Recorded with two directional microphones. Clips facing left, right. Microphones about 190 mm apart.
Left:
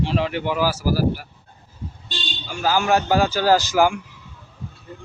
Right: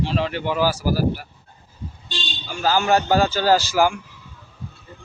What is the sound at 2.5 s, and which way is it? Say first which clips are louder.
A man's voice: right 1 dB; 10° left (ahead or behind).